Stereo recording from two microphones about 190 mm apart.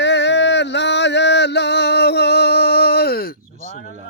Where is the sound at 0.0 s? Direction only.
65° left (ahead or behind).